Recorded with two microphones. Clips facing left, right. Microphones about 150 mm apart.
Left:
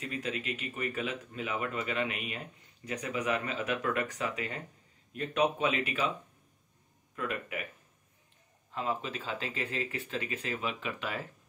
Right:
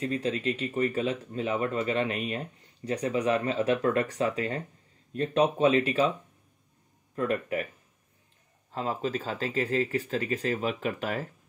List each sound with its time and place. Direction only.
0.0 s speech: 35° right (ahead or behind)
7.2 s speech: 40° right (ahead or behind)
8.7 s speech: 35° right (ahead or behind)